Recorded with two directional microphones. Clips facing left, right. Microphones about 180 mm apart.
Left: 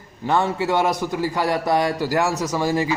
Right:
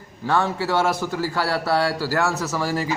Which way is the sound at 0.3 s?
15° left (ahead or behind).